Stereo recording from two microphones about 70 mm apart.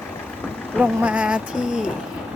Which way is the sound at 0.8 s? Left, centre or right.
Centre.